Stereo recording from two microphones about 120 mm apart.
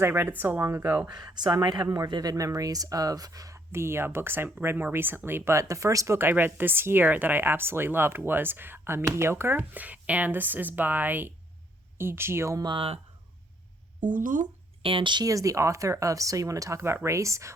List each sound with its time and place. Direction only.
0.0 s speech: 15° right (ahead or behind)
1.1 s speech: 35° right (ahead or behind)
12.6 s speech: 50° right (ahead or behind)
14.0 s speech: 90° right
14.8 s speech: 45° right (ahead or behind); by 17.5 s 25° right (ahead or behind)